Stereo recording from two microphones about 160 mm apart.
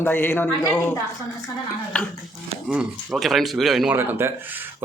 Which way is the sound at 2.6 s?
Centre (ahead or behind).